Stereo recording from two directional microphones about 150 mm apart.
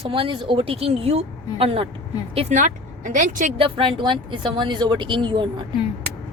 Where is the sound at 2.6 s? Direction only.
60° right (ahead or behind).